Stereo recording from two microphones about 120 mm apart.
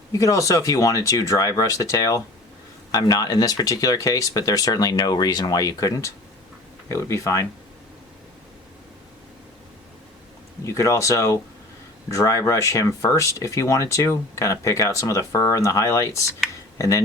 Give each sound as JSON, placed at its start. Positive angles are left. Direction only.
{"t": 0.1, "sound": "speech", "side_deg": 25}
{"t": 10.6, "sound": "speech", "side_deg": 25}